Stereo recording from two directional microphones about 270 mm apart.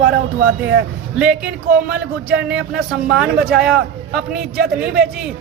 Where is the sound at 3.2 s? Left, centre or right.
Centre.